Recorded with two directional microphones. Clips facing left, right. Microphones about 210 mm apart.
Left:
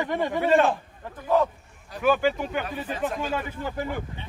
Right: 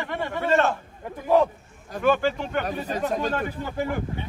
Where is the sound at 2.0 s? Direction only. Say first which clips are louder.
Even; 5° left (ahead or behind).